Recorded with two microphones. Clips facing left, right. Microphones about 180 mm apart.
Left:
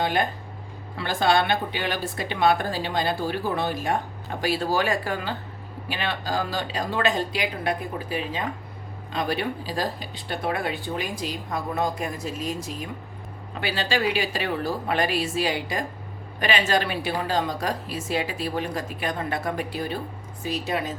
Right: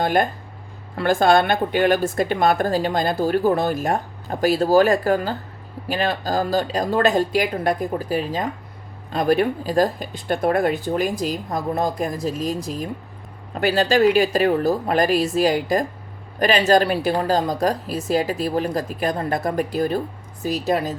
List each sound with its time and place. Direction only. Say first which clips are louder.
0.0 s a woman's voice: right 5 dB; 45° right (ahead or behind)